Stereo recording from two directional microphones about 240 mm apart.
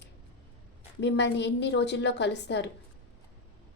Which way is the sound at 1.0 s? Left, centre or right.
Left.